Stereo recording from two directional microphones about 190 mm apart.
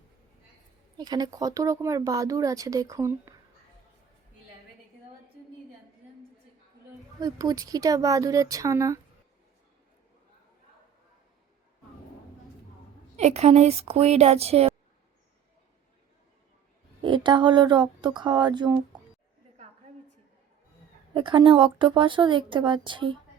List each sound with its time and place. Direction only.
0.9 s speech: 20° right (ahead or behind)
7.2 s speech: 20° right (ahead or behind)
13.1 s speech: 35° right (ahead or behind)
17.0 s speech: 25° right (ahead or behind)
21.1 s speech: 25° right (ahead or behind)